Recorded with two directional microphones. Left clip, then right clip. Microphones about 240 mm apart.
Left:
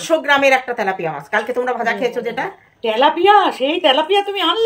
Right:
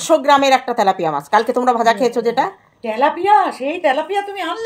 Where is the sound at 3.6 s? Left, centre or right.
Centre.